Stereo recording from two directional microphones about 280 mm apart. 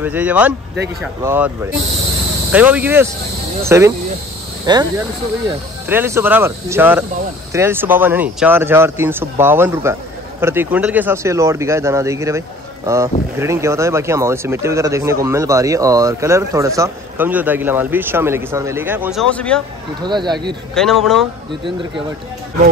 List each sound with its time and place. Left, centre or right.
0.0 s speech: centre
5.9 s speech: centre
19.3 s speech: centre
20.0 s speech: centre
20.7 s speech: centre